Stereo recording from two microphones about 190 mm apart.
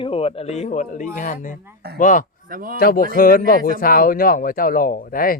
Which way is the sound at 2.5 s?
50° right (ahead or behind).